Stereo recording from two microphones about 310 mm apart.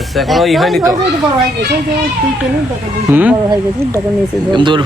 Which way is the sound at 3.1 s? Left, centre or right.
Centre.